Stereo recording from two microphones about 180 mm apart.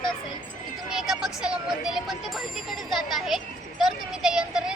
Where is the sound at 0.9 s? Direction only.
Centre (ahead or behind).